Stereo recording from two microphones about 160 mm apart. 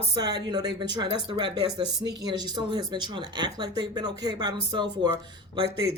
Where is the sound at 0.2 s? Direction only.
25° right (ahead or behind).